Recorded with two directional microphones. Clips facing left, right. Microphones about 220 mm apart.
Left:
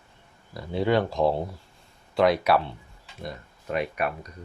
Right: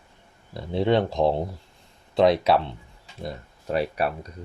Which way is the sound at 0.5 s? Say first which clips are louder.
Right 2 dB; 25° right (ahead or behind).